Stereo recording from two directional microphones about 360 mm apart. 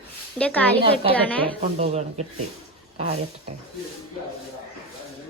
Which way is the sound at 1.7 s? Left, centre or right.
Centre.